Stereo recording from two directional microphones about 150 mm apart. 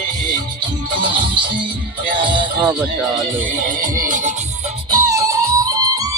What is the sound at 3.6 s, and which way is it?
Music, 65° right (ahead or behind).